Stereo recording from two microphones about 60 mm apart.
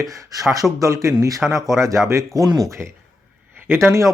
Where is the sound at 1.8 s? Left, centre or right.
Right.